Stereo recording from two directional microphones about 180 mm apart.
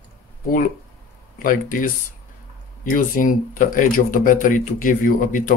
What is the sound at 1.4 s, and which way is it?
Speech, 50° left (ahead or behind).